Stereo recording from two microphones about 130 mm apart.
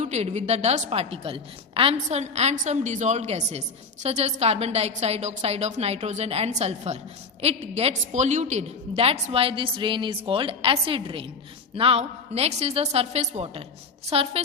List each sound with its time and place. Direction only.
0.0 s a woman's voice: 60° right (ahead or behind)
2.0 s a woman's voice: 60° right (ahead or behind)